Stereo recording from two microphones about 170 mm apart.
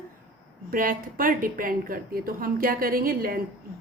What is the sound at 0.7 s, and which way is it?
A woman's voice, 55° right (ahead or behind).